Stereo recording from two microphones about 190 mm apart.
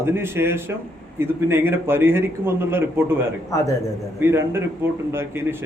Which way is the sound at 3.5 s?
15° left (ahead or behind).